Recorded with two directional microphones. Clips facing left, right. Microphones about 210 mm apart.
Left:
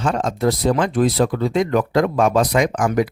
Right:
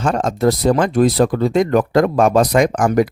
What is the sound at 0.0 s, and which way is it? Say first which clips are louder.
Speech: right 3 dB; 45° right (ahead or behind).